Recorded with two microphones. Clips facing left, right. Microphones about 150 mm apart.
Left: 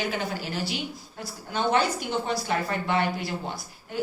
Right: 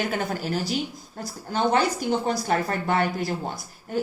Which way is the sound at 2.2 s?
45° right (ahead or behind).